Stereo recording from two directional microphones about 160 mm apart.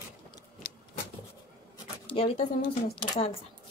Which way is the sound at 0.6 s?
70° left (ahead or behind).